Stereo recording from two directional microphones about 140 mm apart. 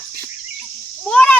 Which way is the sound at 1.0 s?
5° left (ahead or behind).